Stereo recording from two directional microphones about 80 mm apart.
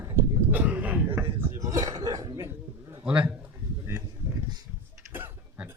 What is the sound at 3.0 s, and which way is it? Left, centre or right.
Speech, centre.